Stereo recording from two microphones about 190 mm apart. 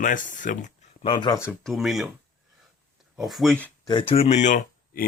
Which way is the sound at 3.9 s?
25° left (ahead or behind).